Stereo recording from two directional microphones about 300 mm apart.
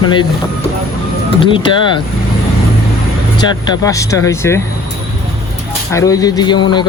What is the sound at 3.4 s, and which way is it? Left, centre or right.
Speech, centre.